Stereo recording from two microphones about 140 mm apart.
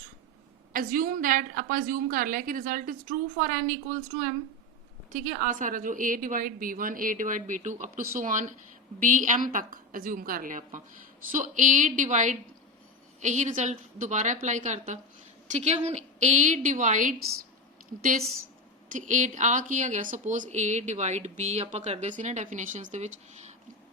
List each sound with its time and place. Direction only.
0.7 s a woman's voice: 85° right; by 17.2 s 65° right (ahead or behind)
18.9 s speech: 65° right (ahead or behind)